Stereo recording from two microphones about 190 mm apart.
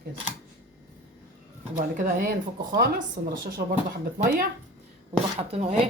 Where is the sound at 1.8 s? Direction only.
45° right (ahead or behind).